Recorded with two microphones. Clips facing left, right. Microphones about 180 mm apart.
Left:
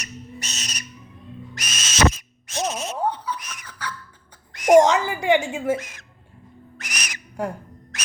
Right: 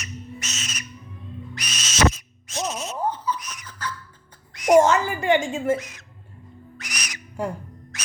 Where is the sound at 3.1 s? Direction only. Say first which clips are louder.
Even; 65° left (ahead or behind).